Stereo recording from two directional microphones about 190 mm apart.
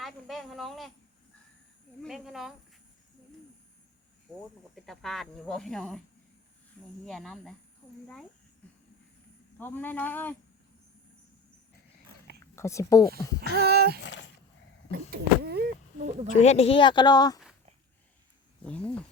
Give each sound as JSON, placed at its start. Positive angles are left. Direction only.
{"t": 0.0, "sound": "speech", "side_deg": 0}
{"t": 2.0, "sound": "speech", "side_deg": 0}
{"t": 4.7, "sound": "speech", "side_deg": 0}
{"t": 7.0, "sound": "speech", "side_deg": 0}
{"t": 9.6, "sound": "speech", "side_deg": 10}
{"t": 12.5, "sound": "speech", "side_deg": 15}
{"t": 13.5, "sound": "a sound", "side_deg": -55}
{"t": 14.0, "sound": "a sound", "side_deg": 70}
{"t": 14.8, "sound": "speech", "side_deg": -55}
{"t": 16.0, "sound": "speech", "side_deg": -35}
{"t": 16.3, "sound": "speech", "side_deg": 35}
{"t": 18.6, "sound": "speech", "side_deg": 5}